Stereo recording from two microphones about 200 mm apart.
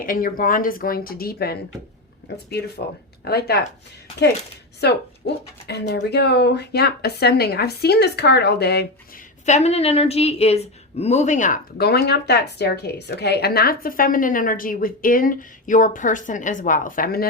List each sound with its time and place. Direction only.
0.0 s a woman's voice: 45° left (ahead or behind)
4.8 s speech: 55° left (ahead or behind)
9.5 s a woman's voice: 35° left (ahead or behind)